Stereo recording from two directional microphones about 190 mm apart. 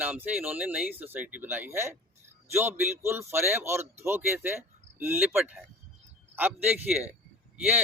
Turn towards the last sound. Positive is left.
turn(degrees=-10)  # may be behind; listen again after turning